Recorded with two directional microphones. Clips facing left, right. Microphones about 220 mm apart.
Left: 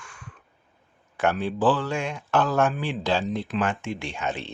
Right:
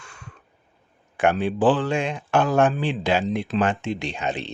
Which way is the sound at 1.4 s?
15° right (ahead or behind).